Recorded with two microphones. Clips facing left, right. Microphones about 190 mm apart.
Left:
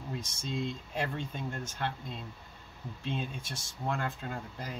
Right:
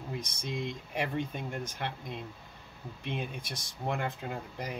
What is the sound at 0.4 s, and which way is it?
Speech, 60° right (ahead or behind).